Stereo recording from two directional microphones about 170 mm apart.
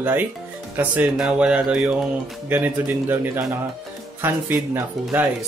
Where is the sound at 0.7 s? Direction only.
10° right (ahead or behind).